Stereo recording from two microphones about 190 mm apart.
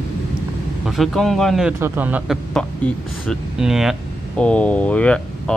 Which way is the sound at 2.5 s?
5° left (ahead or behind).